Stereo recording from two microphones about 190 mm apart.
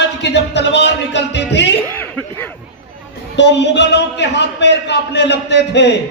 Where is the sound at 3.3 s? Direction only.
65° left (ahead or behind).